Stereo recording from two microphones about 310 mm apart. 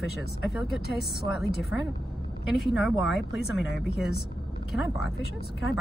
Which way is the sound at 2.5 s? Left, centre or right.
Centre.